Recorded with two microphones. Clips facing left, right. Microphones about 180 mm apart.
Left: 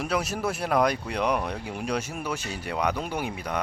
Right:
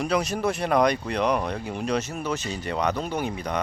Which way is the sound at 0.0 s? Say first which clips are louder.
Right 3 dB; 5° left (ahead or behind).